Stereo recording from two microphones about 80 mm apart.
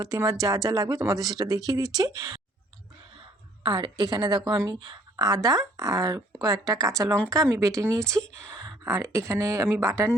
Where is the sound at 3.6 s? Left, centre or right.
Right.